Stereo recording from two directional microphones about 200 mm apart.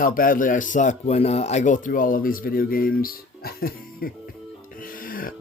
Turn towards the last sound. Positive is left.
turn(degrees=45)  # may be behind; listen again after turning